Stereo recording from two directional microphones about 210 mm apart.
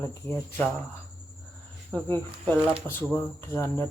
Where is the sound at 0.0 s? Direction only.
15° left (ahead or behind).